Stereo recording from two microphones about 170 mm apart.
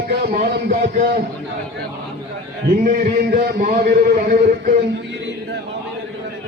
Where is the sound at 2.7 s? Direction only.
55° right (ahead or behind).